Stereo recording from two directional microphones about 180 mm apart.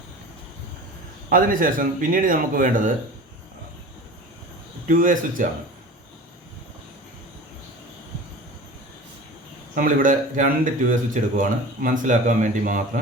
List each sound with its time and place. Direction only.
1.3 s speech: 50° right (ahead or behind)
4.9 s speech: 50° right (ahead or behind)
9.7 s speech: 50° right (ahead or behind)